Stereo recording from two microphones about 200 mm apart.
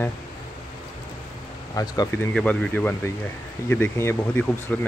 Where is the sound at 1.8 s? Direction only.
15° left (ahead or behind).